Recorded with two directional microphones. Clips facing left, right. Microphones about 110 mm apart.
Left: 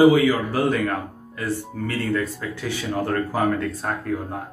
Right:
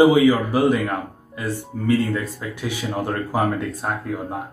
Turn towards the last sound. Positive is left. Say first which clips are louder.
# even
turn(degrees=-15)  # may be behind; listen again after turning